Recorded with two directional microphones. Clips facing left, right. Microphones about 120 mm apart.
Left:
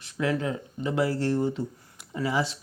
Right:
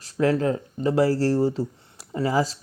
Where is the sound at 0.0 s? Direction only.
40° right (ahead or behind).